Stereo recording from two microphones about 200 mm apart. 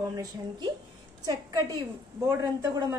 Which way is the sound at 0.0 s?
20° right (ahead or behind).